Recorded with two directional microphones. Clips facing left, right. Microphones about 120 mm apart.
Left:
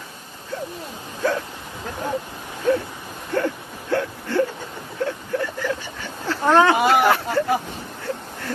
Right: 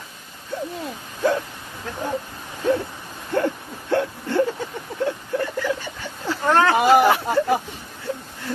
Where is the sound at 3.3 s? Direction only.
25° right (ahead or behind).